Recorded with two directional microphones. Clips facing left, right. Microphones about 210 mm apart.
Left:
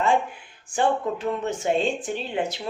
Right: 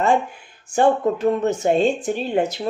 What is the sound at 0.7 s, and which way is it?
Speech, 40° right (ahead or behind).